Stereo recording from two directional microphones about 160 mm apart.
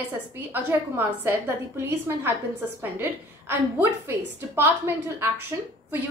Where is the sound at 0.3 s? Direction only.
15° right (ahead or behind).